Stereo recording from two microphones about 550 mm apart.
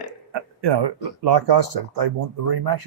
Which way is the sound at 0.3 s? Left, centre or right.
Right.